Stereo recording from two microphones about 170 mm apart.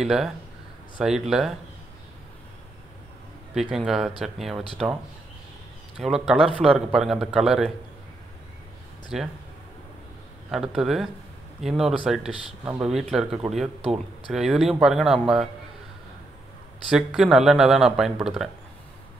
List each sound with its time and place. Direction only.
0.0 s speech: 5° right (ahead or behind)
3.5 s speech: centre (ahead or behind)
5.9 s speech: centre (ahead or behind)
9.1 s speech: centre (ahead or behind)
10.5 s speech: 5° right (ahead or behind)
16.9 s speech: 5° right (ahead or behind)